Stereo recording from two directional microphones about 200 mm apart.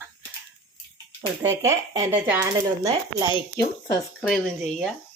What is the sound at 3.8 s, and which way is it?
Speech, 15° left (ahead or behind).